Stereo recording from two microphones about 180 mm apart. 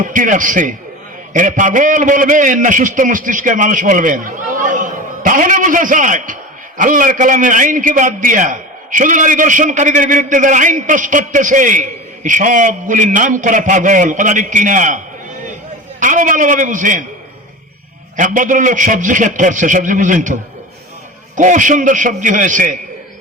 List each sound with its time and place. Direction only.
0.0 s a man's voice: 45° right (ahead or behind)
16.0 s a man's voice: 45° right (ahead or behind)
18.2 s a man's voice: 45° right (ahead or behind)